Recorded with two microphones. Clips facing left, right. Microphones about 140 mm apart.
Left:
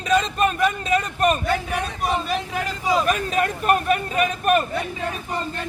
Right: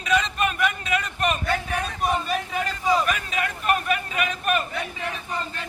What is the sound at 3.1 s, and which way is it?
A man's voice, 40° left (ahead or behind).